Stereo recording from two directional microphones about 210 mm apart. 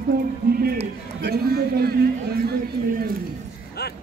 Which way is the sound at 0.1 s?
45° right (ahead or behind).